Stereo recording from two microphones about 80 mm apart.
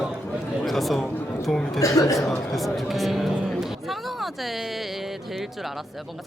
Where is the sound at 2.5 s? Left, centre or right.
Centre.